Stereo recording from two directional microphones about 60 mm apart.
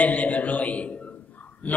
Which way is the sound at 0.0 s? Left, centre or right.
Left.